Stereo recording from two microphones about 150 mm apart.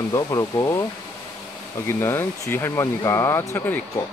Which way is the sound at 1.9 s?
15° left (ahead or behind).